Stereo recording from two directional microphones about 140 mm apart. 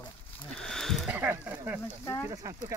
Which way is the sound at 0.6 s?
5° left (ahead or behind).